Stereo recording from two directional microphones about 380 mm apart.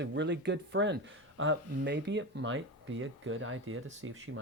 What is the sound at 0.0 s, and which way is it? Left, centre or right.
Speech, right.